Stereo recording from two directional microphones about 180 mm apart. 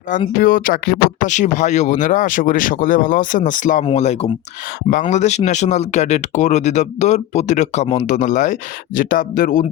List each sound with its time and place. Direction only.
0.3 s speech: 50° left (ahead or behind)